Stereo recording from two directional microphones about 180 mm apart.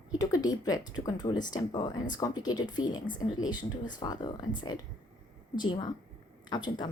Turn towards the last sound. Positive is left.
turn(degrees=25)  # may be behind; listen again after turning